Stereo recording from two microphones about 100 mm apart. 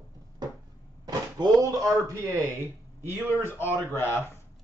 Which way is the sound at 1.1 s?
35° right (ahead or behind).